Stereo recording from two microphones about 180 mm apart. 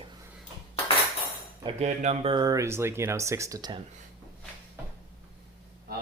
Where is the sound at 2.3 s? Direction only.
20° right (ahead or behind).